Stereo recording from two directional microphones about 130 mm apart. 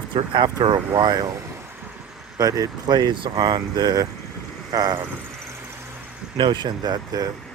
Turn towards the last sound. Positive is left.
turn(degrees=-30)  # may be behind; listen again after turning